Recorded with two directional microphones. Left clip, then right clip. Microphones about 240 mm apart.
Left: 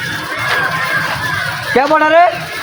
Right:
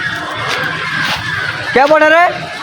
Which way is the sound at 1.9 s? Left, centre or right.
Centre.